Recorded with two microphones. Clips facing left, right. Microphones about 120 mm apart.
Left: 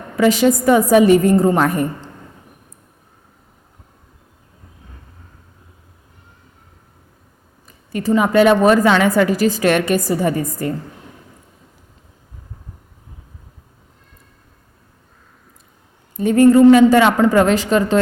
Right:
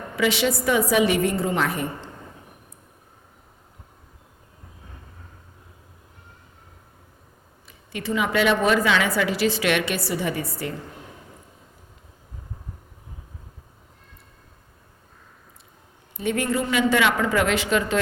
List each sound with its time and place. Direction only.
0.2 s a woman's voice: 40° left (ahead or behind)
7.7 s a woman's voice: 40° left (ahead or behind)
16.1 s speech: 40° left (ahead or behind)